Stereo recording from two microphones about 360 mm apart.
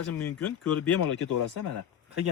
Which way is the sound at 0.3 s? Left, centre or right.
Left.